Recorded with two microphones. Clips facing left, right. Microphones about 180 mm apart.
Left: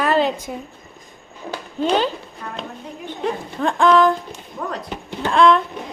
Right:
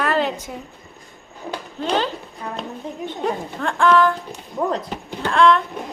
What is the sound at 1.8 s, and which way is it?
Speech, 15° left (ahead or behind).